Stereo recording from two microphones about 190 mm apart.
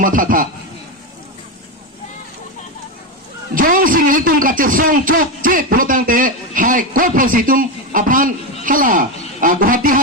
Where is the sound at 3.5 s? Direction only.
45° right (ahead or behind).